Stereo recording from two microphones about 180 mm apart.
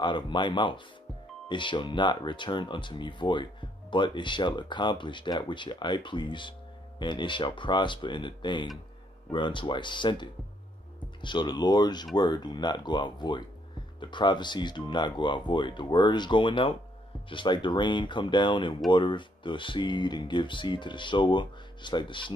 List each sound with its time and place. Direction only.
0.0 s speech: 25° left (ahead or behind)